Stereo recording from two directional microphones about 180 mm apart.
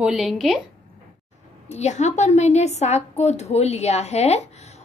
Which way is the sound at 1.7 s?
40° left (ahead or behind).